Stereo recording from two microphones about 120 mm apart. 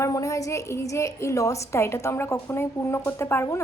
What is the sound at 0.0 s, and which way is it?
A woman's voice, 25° left (ahead or behind).